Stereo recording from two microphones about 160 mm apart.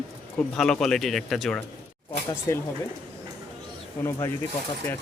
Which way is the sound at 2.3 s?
20° left (ahead or behind).